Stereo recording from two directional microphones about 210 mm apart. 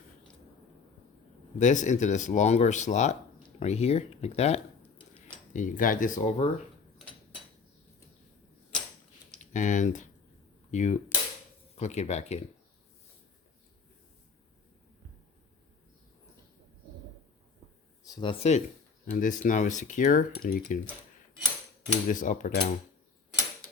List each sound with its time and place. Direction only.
1.5 s speech: 35° left (ahead or behind)
9.5 s speech: 35° left (ahead or behind)
18.0 s speech: 20° left (ahead or behind); by 20.8 s 40° left (ahead or behind)
22.1 s speech: 40° left (ahead or behind)